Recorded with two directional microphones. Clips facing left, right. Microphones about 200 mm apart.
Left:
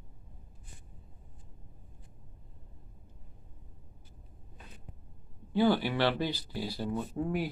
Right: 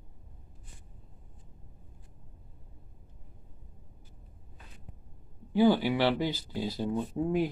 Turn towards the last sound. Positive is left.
turn(degrees=-20)  # may be behind; listen again after turning